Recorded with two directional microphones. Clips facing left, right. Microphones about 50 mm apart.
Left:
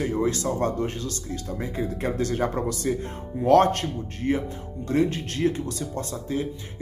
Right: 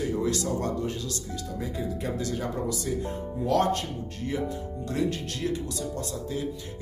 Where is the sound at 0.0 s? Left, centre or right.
Left.